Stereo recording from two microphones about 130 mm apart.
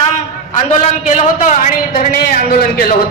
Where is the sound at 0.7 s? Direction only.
65° left (ahead or behind); by 2.0 s 80° left.